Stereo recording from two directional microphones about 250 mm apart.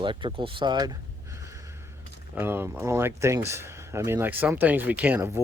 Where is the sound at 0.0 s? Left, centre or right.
Centre.